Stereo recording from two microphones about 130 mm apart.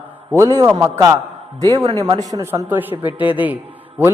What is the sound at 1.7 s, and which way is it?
A man's voice, 30° right (ahead or behind).